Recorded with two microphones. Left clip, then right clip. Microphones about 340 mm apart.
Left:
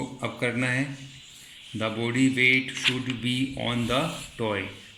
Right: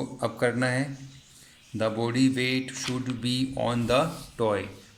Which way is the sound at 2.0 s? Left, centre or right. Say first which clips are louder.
Left 6 dB; right.